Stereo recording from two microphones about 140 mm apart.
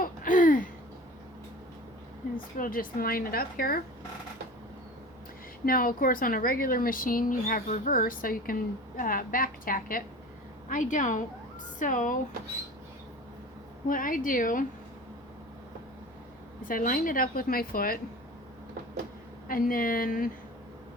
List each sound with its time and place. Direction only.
0.0 s a sound: 75° left (ahead or behind)
2.6 s speech: 90° left
5.6 s a woman's voice: 90° left
10.7 s a woman's voice: 65° left (ahead or behind)
13.8 s speech: 75° left (ahead or behind)
16.6 s speech: 80° left
19.5 s a woman's voice: 90° left